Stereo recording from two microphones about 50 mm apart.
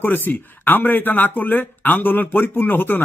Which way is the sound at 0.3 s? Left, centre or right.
Left.